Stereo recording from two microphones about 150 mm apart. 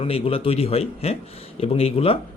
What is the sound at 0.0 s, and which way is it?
Speech, 40° left (ahead or behind).